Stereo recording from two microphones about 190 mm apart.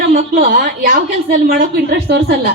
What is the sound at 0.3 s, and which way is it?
Speech, 50° right (ahead or behind).